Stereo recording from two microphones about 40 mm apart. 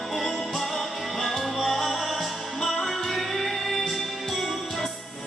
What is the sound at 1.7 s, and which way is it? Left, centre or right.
Music, centre.